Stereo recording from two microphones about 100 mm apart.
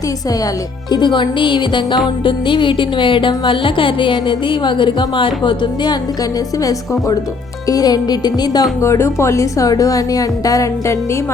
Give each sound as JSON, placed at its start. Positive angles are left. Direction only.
{"t": 0.9, "sound": "speech", "side_deg": 50}
{"t": 6.6, "sound": "a woman's voice", "side_deg": 35}
{"t": 8.8, "sound": "a woman's voice", "side_deg": 30}